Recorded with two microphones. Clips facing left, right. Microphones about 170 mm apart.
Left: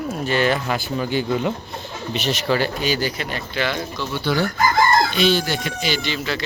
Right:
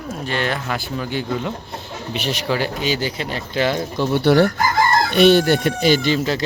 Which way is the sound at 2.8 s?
25° right (ahead or behind).